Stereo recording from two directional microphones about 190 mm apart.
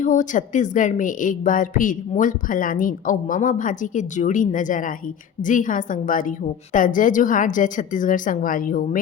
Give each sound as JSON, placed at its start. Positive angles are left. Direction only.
{"t": 0.0, "sound": "a woman's voice", "side_deg": 40}